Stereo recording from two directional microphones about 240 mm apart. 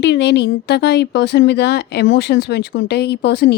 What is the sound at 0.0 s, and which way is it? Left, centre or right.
Speech, left.